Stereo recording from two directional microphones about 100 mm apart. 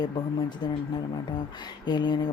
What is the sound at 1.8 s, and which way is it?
Speech, 45° left (ahead or behind).